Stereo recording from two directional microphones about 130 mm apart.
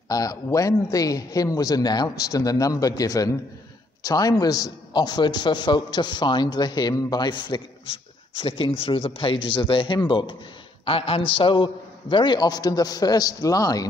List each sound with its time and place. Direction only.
0.1 s a man's voice: 25° left (ahead or behind)